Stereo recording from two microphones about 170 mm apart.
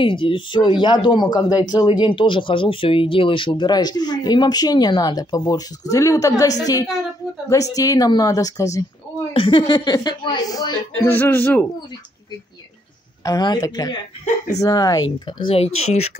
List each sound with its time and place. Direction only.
0.0 s speech: 30° left (ahead or behind)
9.3 s speech: 30° left (ahead or behind); by 11.6 s 10° left (ahead or behind)
13.2 s speech: 20° left (ahead or behind); by 16.1 s 40° left (ahead or behind)